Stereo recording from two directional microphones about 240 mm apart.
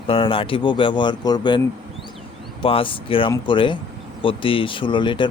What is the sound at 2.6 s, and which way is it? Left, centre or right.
Speech, left.